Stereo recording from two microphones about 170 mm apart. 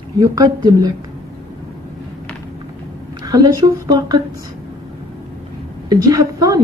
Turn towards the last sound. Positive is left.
turn(degrees=-20)  # may be behind; listen again after turning